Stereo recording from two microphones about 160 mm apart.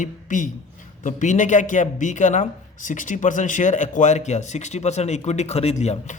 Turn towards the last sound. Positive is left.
turn(degrees=45)  # may be behind; listen again after turning